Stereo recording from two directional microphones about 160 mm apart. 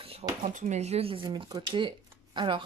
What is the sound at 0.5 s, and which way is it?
A woman's voice, 50° right (ahead or behind).